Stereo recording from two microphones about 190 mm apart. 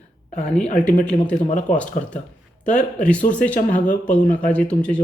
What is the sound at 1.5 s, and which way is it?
Speech, 40° left (ahead or behind).